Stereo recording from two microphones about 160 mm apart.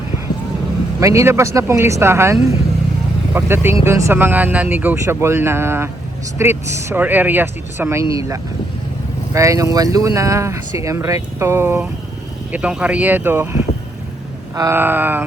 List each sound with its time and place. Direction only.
0.9 s speech: 20° right (ahead or behind)